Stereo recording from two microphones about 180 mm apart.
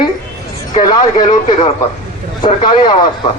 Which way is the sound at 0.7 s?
25° left (ahead or behind).